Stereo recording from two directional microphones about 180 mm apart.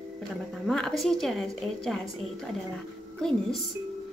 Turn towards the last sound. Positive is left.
turn(degrees=5)  # may be behind; listen again after turning